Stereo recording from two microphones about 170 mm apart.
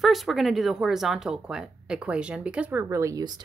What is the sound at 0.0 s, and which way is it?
Speech, centre (ahead or behind).